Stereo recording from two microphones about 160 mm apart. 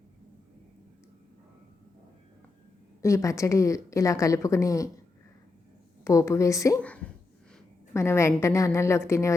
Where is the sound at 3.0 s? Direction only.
20° left (ahead or behind).